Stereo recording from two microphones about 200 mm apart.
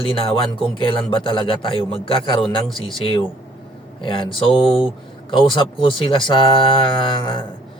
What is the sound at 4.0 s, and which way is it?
A man's voice, 25° left (ahead or behind).